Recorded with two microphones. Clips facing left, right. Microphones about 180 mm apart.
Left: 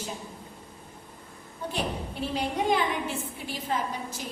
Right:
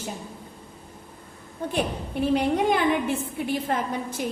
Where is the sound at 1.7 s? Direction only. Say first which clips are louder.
Right 5 dB; 55° right (ahead or behind).